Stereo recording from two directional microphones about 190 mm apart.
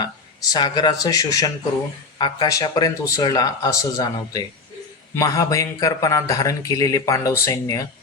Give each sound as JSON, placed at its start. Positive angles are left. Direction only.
{"t": 0.5, "sound": "speech", "side_deg": 20}